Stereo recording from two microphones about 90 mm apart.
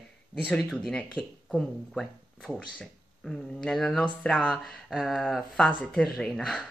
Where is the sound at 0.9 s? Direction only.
10° left (ahead or behind).